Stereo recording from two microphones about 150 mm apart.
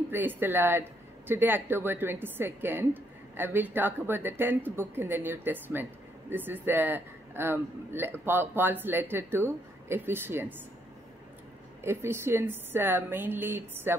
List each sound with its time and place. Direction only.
0.1 s a woman's voice: 15° right (ahead or behind)
11.8 s a woman's voice: 15° right (ahead or behind)